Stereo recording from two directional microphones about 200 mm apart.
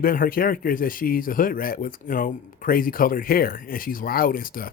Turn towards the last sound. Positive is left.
turn(degrees=45)  # may be behind; listen again after turning